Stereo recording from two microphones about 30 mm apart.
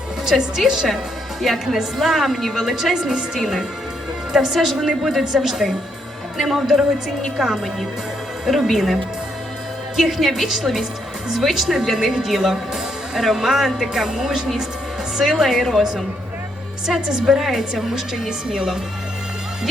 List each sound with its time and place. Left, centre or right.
0.3 s a woman's voice: centre
4.3 s a woman's voice: centre
10.0 s a woman's voice: centre
16.8 s speech: centre